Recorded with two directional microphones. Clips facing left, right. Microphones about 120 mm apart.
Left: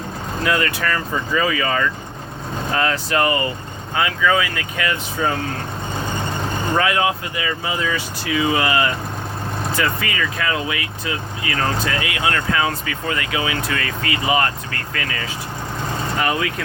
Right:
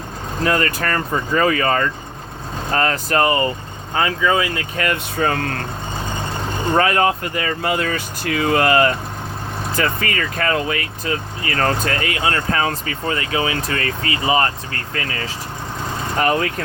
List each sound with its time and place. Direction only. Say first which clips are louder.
0.4 s speech: right 1 dB; 45° right (ahead or behind)
4.8 s speech: right 2 dB; 55° right (ahead or behind)
6.7 s speech: right 3 dB; 40° right (ahead or behind)
7.6 s speech: right 4 dB; 60° right (ahead or behind); by 15.2 s 30° right (ahead or behind)